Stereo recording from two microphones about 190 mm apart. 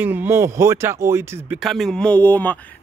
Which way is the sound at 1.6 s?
Centre (ahead or behind).